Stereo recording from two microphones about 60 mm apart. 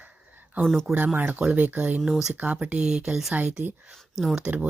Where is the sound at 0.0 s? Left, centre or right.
Right.